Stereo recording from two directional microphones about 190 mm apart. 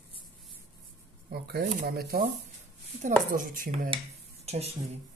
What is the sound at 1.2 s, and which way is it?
Speech, 55° right (ahead or behind).